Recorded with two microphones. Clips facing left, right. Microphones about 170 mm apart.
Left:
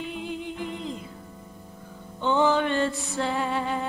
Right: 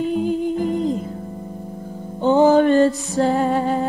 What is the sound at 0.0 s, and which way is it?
Music, 40° right (ahead or behind).